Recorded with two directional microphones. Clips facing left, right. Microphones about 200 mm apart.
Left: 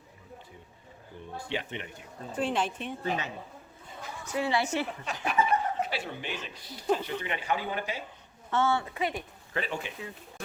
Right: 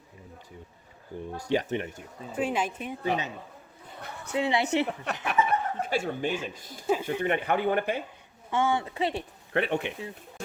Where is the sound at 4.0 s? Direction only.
60° right (ahead or behind).